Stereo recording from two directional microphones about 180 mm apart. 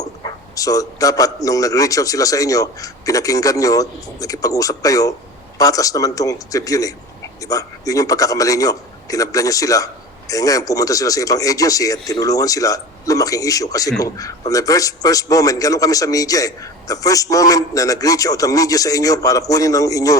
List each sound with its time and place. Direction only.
0.0 s a man's voice: 20° left (ahead or behind)